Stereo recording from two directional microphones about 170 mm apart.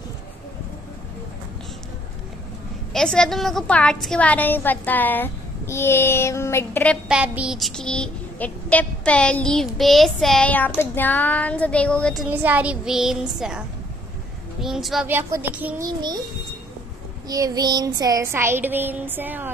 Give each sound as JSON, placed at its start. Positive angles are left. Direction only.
{"t": 2.9, "sound": "a woman's voice", "side_deg": 5}
{"t": 7.1, "sound": "child singing", "side_deg": -5}
{"t": 15.0, "sound": "child singing", "side_deg": -10}
{"t": 17.3, "sound": "child singing", "side_deg": -20}